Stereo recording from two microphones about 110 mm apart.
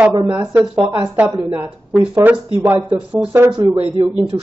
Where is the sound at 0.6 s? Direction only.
15° right (ahead or behind).